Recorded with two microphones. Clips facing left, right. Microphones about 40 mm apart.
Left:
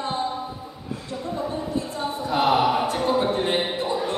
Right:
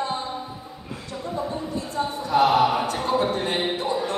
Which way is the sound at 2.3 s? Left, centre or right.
Left.